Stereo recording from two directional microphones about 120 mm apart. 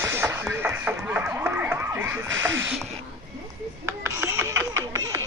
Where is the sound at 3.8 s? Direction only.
25° right (ahead or behind).